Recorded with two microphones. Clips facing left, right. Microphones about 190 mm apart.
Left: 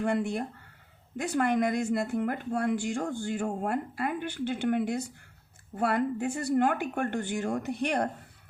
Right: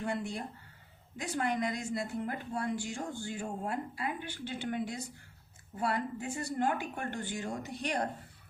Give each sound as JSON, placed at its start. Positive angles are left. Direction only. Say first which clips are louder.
{"t": 0.0, "sound": "speech", "louder": "left 7 dB", "side_deg": 55}